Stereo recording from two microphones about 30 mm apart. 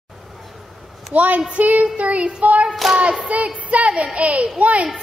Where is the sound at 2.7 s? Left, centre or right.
Centre.